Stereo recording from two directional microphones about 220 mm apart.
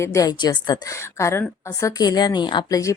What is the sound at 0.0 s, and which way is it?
A woman's voice, 15° left (ahead or behind).